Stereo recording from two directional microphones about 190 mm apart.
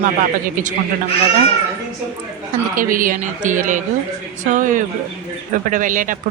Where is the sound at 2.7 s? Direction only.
45° right (ahead or behind).